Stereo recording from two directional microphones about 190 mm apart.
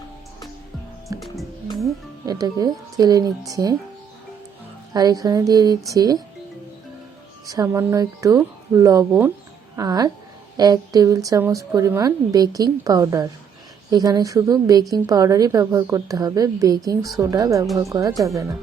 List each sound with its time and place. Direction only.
1.2 s music: centre (ahead or behind)
2.2 s a woman's voice: 20° right (ahead or behind)
4.9 s a woman's voice: 20° right (ahead or behind)
7.4 s a woman's voice: 20° right (ahead or behind)